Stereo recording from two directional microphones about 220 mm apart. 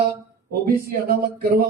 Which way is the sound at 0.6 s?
40° right (ahead or behind).